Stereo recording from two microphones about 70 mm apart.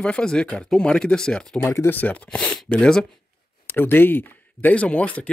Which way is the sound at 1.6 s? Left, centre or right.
Left.